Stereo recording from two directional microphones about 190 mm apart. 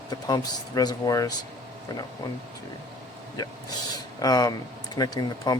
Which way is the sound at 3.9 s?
20° left (ahead or behind).